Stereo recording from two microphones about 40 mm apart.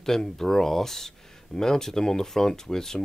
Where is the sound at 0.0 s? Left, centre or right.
Centre.